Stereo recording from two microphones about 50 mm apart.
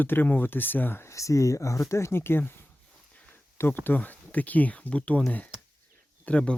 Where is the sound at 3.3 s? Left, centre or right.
Left.